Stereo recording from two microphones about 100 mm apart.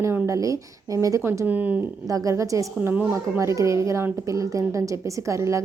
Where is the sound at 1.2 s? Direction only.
20° right (ahead or behind).